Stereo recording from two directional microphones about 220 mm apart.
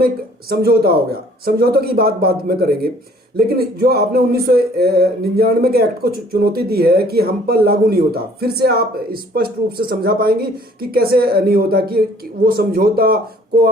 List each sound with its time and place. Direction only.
0.0 s speech: 45° right (ahead or behind)